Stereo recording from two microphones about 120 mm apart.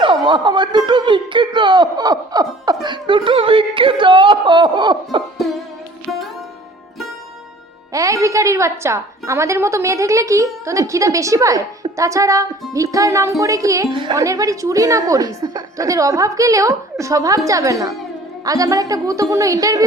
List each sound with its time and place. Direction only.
0.0 s speech: 40° right (ahead or behind)
2.8 s music: 40° right (ahead or behind)
5.4 s music: centre (ahead or behind)
7.9 s a woman's voice: 25° right (ahead or behind)
13.9 s a woman's voice: 40° right (ahead or behind)
14.2 s a woman's voice: 30° right (ahead or behind)